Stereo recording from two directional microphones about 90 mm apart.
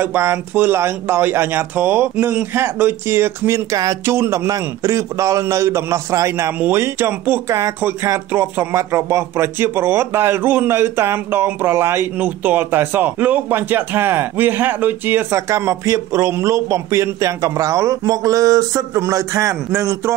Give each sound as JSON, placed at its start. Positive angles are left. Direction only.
{"t": 0.0, "sound": "a man's voice", "side_deg": -25}
{"t": 15.4, "sound": "a man's voice", "side_deg": -35}